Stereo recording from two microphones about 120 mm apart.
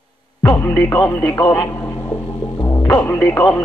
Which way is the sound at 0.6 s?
30° left (ahead or behind).